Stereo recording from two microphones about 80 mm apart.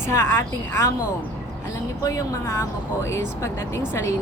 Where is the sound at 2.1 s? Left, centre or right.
Left.